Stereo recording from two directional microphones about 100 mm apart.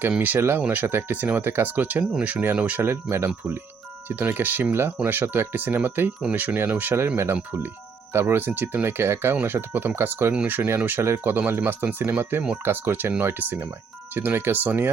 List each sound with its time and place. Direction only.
0.2 s speech: 20° right (ahead or behind)
8.1 s speech: 25° right (ahead or behind)